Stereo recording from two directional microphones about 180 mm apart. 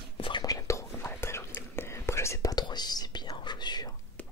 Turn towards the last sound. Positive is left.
turn(degrees=5)  # may be behind; listen again after turning